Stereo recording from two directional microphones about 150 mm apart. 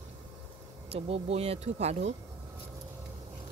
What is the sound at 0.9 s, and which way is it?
Speech, 40° right (ahead or behind).